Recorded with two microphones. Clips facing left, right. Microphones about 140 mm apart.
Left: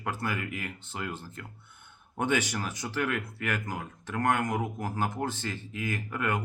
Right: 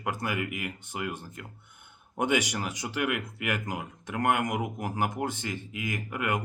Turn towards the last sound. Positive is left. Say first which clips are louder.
# even
turn(degrees=-15)  # may be behind; listen again after turning